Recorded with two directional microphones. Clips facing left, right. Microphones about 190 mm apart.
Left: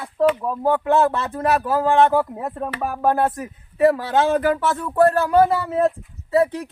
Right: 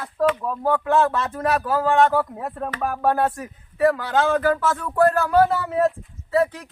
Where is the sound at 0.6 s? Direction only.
25° left (ahead or behind).